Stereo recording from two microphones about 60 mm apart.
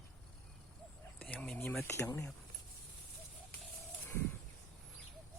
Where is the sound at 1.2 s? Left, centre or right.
Left.